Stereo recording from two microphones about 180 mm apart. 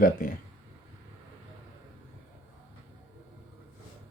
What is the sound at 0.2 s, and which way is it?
Speech, 50° left (ahead or behind).